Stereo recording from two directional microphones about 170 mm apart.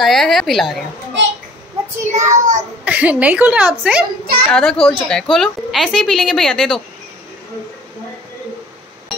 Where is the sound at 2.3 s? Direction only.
45° right (ahead or behind).